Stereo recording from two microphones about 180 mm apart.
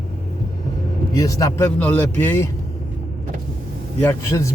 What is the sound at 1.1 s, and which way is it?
A man's voice, 20° left (ahead or behind).